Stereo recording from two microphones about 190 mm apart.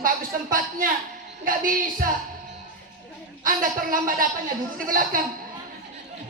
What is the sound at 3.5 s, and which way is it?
A woman's voice, 45° right (ahead or behind).